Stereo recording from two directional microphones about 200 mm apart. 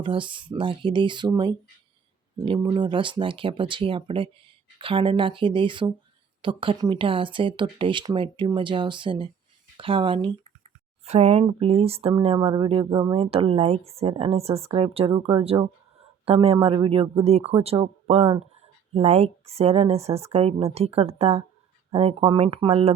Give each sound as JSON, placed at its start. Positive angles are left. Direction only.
{"t": 0.0, "sound": "speech", "side_deg": -25}